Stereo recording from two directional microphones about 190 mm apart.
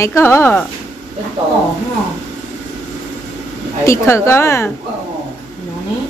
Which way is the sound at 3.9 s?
15° left (ahead or behind).